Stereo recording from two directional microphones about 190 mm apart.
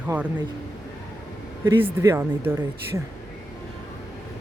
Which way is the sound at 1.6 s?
10° right (ahead or behind).